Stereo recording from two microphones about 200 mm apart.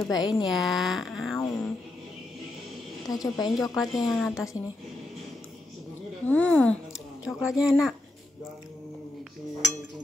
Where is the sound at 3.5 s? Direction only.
Centre (ahead or behind).